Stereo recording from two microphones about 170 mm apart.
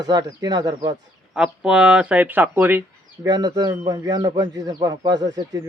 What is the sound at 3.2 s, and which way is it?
Speech, 25° right (ahead or behind).